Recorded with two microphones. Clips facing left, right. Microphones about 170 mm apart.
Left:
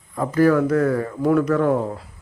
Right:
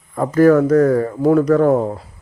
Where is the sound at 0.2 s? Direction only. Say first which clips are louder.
Right 5 dB; 50° right (ahead or behind).